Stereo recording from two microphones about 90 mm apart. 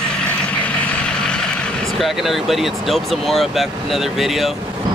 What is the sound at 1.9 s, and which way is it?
Speech, centre (ahead or behind).